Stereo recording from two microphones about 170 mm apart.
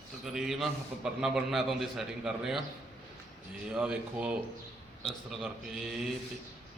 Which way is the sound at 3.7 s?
5° right (ahead or behind).